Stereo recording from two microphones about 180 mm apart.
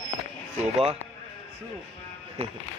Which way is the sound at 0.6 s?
35° right (ahead or behind).